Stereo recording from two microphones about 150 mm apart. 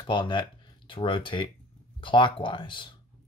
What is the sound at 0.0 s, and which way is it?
Speech, 30° left (ahead or behind).